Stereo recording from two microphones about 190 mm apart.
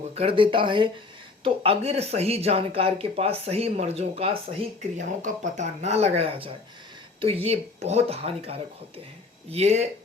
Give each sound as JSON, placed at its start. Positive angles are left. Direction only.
{"t": 0.1, "sound": "speech", "side_deg": -30}
{"t": 4.8, "sound": "speech", "side_deg": -40}